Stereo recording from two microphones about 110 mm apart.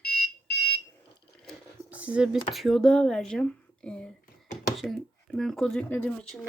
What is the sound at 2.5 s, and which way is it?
Speech, centre (ahead or behind).